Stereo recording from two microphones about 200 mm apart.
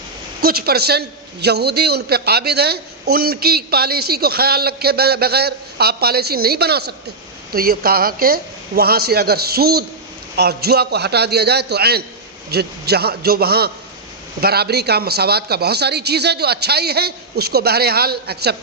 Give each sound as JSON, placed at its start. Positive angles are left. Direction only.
{"t": 0.4, "sound": "a man's voice", "side_deg": -50}